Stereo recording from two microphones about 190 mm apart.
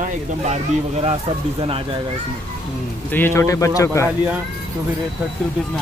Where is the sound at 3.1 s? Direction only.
10° left (ahead or behind).